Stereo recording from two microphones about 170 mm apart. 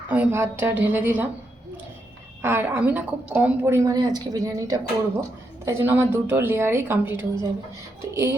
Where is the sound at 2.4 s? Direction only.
10° right (ahead or behind).